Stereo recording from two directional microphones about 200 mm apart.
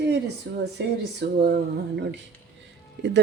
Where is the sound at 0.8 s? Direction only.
55° right (ahead or behind).